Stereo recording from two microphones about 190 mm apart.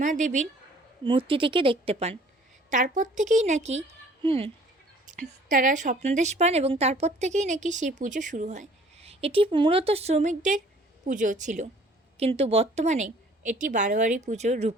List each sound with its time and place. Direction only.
0.0 s speech: 40° right (ahead or behind)
1.0 s a woman's voice: 25° right (ahead or behind)
5.1 s a woman's voice: 40° right (ahead or behind)